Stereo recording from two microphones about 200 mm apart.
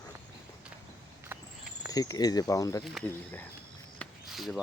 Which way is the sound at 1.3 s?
10° right (ahead or behind).